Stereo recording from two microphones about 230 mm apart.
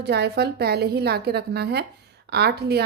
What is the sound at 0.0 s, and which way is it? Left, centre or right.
A woman's voice, right.